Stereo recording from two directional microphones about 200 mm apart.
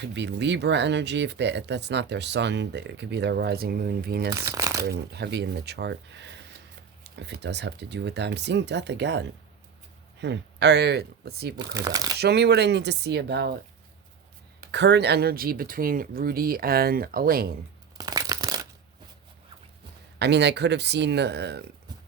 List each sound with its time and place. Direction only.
0.0 s speech: 60° right (ahead or behind)
4.3 s speech: 15° right (ahead or behind)
4.9 s speech: 55° right (ahead or behind)
11.8 s speech: 15° right (ahead or behind)
12.2 s speech: 55° right (ahead or behind)
14.6 s speech: 60° right (ahead or behind)
17.9 s crumpling: 20° right (ahead or behind)
20.1 s speech: 60° right (ahead or behind)